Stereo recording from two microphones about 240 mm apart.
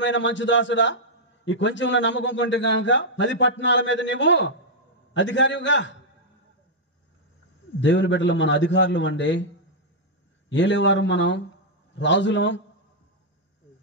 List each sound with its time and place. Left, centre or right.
0.0 s a man's voice: left
7.8 s a man's voice: left
10.5 s a man's voice: left